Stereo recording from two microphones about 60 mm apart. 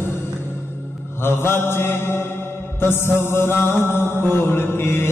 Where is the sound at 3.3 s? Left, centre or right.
Left.